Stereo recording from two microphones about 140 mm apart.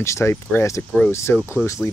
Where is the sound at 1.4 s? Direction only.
10° right (ahead or behind).